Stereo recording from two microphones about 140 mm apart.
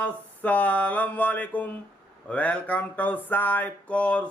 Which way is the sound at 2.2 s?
10° left (ahead or behind).